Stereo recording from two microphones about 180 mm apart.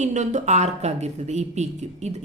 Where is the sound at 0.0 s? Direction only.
40° right (ahead or behind).